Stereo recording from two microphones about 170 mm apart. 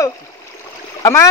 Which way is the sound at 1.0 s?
15° left (ahead or behind).